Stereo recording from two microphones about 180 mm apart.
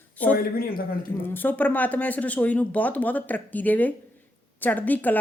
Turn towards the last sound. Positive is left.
turn(degrees=10)  # may be behind; listen again after turning